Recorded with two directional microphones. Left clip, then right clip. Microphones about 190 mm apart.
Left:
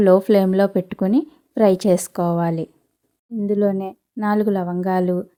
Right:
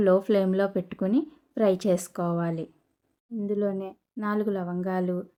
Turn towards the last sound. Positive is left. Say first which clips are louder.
# left 9 dB
turn(degrees=40)  # may be behind; listen again after turning